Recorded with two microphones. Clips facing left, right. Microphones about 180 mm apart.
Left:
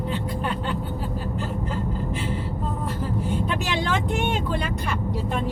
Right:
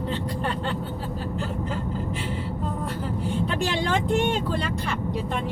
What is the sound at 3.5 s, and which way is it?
Vehicle, 35° right (ahead or behind).